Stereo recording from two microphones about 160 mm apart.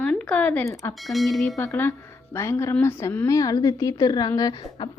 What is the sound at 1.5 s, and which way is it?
Speech, 15° left (ahead or behind).